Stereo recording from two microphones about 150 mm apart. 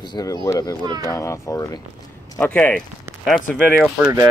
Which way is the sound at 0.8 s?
25° right (ahead or behind).